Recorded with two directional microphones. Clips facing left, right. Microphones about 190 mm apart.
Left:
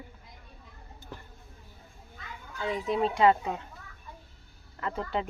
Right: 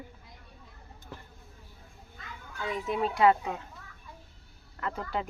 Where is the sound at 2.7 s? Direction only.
25° left (ahead or behind).